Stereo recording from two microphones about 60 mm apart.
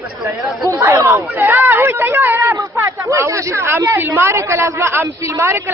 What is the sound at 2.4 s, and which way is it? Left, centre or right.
Speech, right.